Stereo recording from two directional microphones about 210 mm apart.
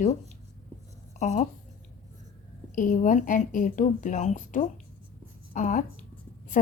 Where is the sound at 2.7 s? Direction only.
40° left (ahead or behind).